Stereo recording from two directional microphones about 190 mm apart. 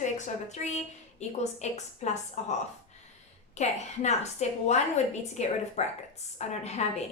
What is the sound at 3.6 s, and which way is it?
A woman's voice, 35° left (ahead or behind).